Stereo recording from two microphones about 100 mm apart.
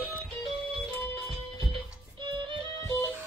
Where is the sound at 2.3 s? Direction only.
55° right (ahead or behind).